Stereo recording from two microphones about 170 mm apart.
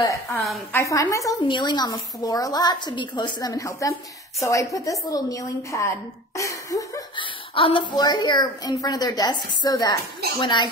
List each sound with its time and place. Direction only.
0.0 s a woman's voice: 20° left (ahead or behind)
7.5 s a woman's voice: 35° left (ahead or behind)